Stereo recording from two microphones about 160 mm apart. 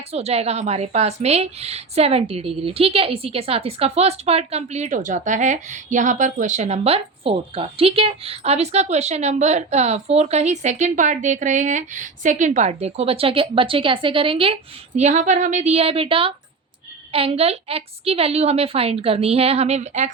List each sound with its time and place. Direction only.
0.1 s a woman's voice: 40° right (ahead or behind)